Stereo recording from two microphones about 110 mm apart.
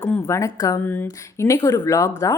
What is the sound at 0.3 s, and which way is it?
A woman's voice, 30° left (ahead or behind).